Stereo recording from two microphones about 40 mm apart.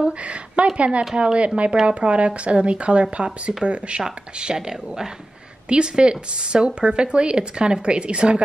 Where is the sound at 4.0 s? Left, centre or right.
Centre.